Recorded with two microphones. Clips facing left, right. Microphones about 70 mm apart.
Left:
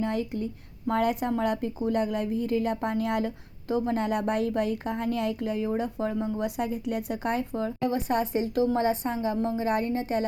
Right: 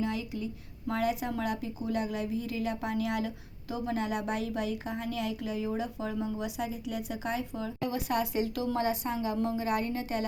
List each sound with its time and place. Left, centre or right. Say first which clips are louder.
0.0 s a woman's voice: left 4 dB; left